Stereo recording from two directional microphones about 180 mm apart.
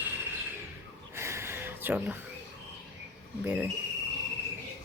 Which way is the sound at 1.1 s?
15° right (ahead or behind).